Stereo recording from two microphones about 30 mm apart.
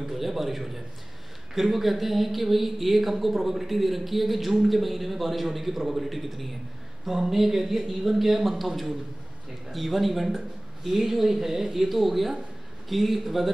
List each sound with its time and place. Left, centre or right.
0.1 s speech: centre